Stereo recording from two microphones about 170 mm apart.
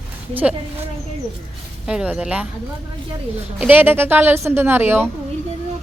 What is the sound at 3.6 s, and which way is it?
A woman's voice, 10° right (ahead or behind).